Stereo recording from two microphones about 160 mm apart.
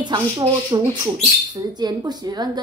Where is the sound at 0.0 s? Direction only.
30° right (ahead or behind).